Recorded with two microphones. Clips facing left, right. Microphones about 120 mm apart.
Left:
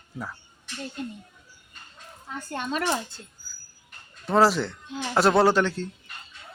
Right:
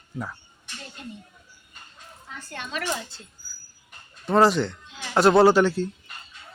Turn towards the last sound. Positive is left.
turn(degrees=-5)  # may be behind; listen again after turning